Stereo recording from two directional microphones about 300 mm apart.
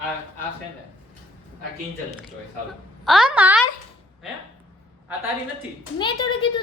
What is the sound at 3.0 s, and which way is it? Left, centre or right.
Speech, centre.